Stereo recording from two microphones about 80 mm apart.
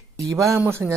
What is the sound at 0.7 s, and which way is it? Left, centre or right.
Speech, right.